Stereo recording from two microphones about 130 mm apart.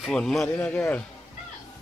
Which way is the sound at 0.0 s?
5° left (ahead or behind).